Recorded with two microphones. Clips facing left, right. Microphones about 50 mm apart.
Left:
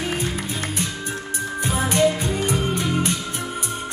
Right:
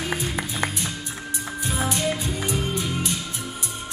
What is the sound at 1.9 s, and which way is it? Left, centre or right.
Music, left.